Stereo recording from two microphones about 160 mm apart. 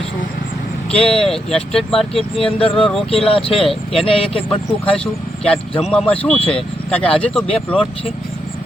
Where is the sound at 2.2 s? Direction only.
35° left (ahead or behind).